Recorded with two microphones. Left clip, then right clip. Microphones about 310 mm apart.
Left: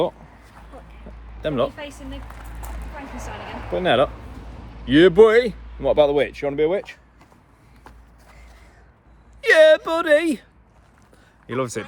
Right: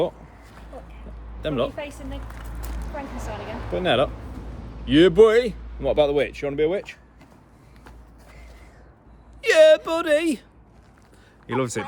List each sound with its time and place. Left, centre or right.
1.1 s a sound: left
1.4 s speech: left
3.4 s speech: left
9.4 s speech: left
11.4 s speech: centre